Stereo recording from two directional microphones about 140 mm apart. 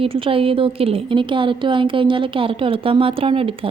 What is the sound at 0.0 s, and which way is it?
A woman's voice, 40° right (ahead or behind).